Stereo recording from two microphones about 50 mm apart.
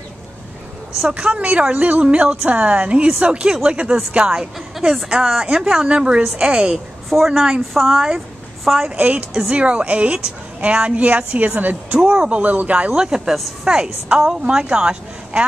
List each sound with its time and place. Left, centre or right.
1.0 s speech: right
5.0 s speech: centre
7.1 s a woman's voice: centre
7.3 s a woman's voice: centre
8.9 s speech: right
12.9 s speech: centre